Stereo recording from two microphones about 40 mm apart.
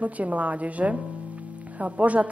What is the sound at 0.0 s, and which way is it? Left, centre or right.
A woman's voice, right.